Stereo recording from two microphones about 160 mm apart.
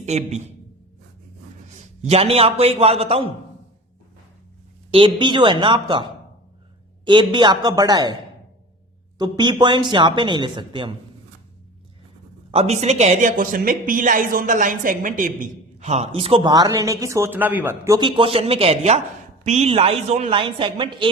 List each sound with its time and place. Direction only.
0.0 s a man's voice: 45° right (ahead or behind)
2.0 s speech: 40° right (ahead or behind)
4.9 s a man's voice: 30° right (ahead or behind)
9.1 s a man's voice: 25° right (ahead or behind)
12.5 s speech: 40° right (ahead or behind)